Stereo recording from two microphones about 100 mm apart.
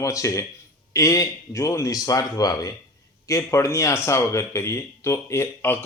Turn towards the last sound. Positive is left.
turn(degrees=20)  # may be behind; listen again after turning